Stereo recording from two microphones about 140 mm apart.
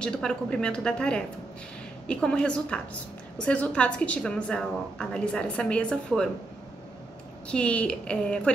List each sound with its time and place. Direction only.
0.0 s a woman's voice: 5° left (ahead or behind)
7.4 s a woman's voice: 10° left (ahead or behind)